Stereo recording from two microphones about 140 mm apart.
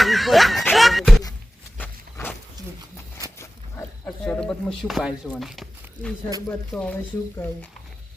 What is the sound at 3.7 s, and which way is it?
Wild animals, 15° left (ahead or behind).